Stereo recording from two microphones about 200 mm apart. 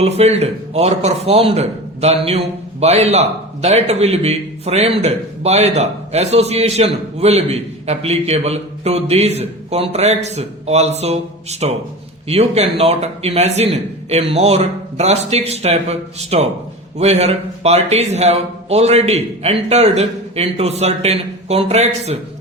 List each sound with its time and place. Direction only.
0.0 s a man's voice: 30° right (ahead or behind)